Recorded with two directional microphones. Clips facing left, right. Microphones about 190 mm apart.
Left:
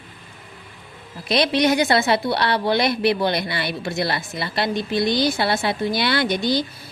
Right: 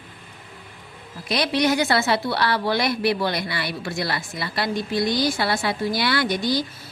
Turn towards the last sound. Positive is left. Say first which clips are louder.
# left 2 dB
turn(degrees=25)  # may be behind; listen again after turning